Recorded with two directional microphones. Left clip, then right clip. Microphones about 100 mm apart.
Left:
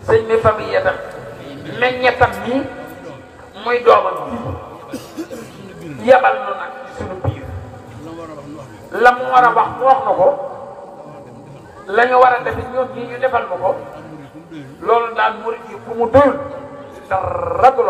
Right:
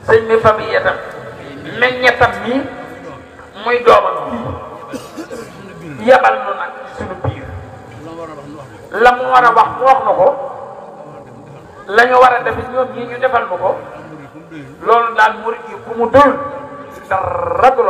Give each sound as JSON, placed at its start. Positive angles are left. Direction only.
{"t": 0.0, "sound": "a man's voice", "side_deg": -40}
{"t": 3.6, "sound": "a sound", "side_deg": -40}
{"t": 8.9, "sound": "a man's voice", "side_deg": -45}
{"t": 11.9, "sound": "a man's voice", "side_deg": -40}
{"t": 14.8, "sound": "a man's voice", "side_deg": -40}